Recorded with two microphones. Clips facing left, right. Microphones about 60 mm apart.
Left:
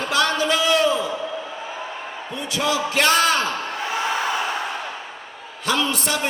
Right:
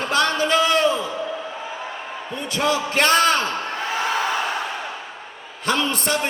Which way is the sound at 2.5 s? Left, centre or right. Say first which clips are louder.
Right 1 dB; right.